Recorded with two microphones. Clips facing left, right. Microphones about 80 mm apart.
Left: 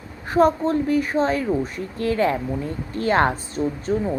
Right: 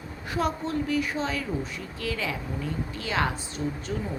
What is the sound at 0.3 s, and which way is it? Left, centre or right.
A woman's voice, left.